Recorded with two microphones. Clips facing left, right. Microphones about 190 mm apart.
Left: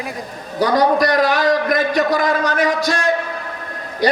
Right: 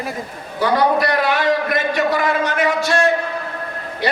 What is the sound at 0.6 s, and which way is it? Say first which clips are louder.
A man's voice: left 2 dB; 40° left (ahead or behind).